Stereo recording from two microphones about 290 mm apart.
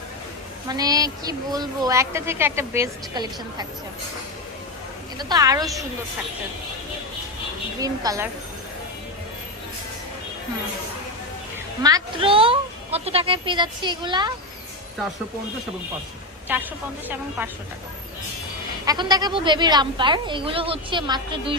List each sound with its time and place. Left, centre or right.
0.7 s a woman's voice: centre
5.1 s a woman's voice: centre
7.8 s a woman's voice: centre
11.8 s a woman's voice: centre
16.5 s a woman's voice: centre
18.9 s a woman's voice: centre